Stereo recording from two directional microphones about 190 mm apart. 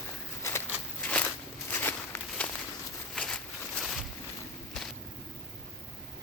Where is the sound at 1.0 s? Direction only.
10° left (ahead or behind).